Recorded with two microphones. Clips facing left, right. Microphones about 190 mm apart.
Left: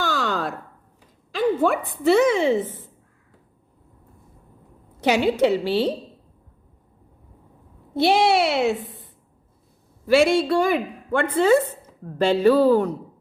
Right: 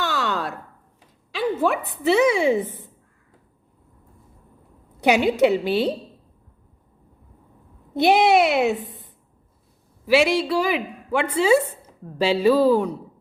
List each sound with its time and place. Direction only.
0.0 s chopping: centre (ahead or behind)
1.6 s a woman's voice: centre (ahead or behind)
4.9 s a woman's voice: 15° right (ahead or behind)
7.9 s a woman's voice: 15° right (ahead or behind)
10.1 s a woman's voice: 5° right (ahead or behind)